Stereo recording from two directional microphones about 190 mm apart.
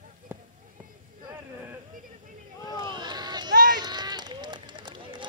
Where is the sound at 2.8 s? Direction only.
25° right (ahead or behind).